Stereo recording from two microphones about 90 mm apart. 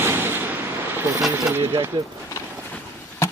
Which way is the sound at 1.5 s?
25° right (ahead or behind).